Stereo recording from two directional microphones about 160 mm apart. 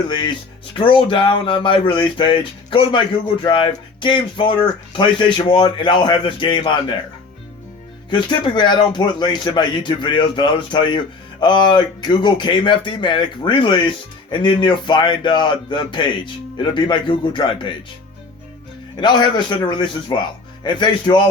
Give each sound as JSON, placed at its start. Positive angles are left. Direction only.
{"t": 0.1, "sound": "speech", "side_deg": 30}
{"t": 8.1, "sound": "speech", "side_deg": 30}
{"t": 18.9, "sound": "speech", "side_deg": 25}